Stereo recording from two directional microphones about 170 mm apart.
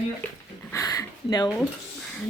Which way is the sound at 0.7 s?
20° left (ahead or behind).